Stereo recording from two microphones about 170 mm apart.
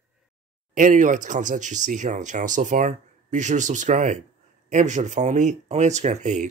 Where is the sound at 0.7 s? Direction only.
50° right (ahead or behind).